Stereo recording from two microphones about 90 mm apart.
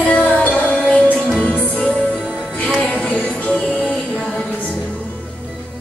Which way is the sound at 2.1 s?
5° right (ahead or behind).